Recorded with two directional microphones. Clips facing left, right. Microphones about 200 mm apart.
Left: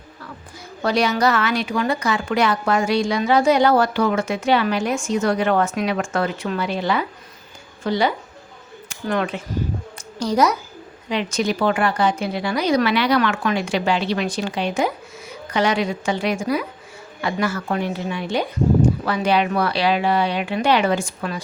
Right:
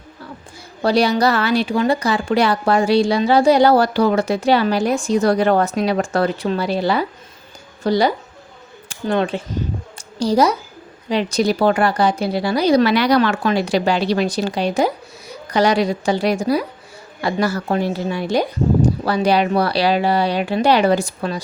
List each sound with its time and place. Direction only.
0.8 s a woman's voice: 35° right (ahead or behind)